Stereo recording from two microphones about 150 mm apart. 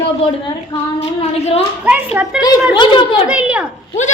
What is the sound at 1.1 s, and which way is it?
Speech, 40° left (ahead or behind).